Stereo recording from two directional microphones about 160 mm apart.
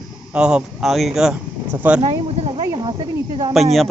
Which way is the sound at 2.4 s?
35° right (ahead or behind).